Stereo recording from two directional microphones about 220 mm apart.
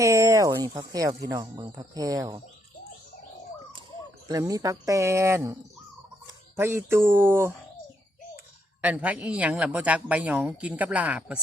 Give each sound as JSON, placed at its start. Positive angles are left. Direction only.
{"t": 0.0, "sound": "speech", "side_deg": -15}
{"t": 4.3, "sound": "speech", "side_deg": -15}
{"t": 8.8, "sound": "speech", "side_deg": -5}